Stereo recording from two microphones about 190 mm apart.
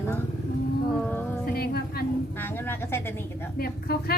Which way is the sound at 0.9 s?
5° left (ahead or behind).